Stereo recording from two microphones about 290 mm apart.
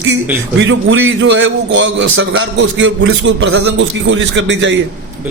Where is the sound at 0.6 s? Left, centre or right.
Right.